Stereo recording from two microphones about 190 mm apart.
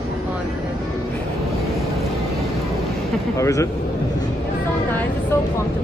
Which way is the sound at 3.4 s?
15° left (ahead or behind).